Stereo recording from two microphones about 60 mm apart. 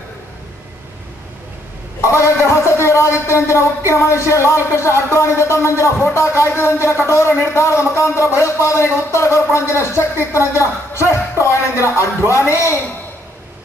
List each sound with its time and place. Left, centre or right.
2.0 s a man's voice: left